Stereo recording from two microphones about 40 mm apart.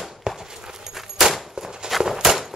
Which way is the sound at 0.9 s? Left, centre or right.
Centre.